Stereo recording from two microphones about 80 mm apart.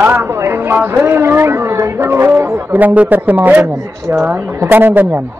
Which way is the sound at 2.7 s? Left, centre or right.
Centre.